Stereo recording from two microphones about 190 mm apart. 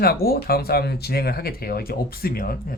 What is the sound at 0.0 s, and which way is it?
Speech, 55° left (ahead or behind).